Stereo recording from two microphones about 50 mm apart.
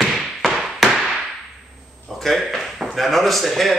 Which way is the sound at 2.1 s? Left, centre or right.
Centre.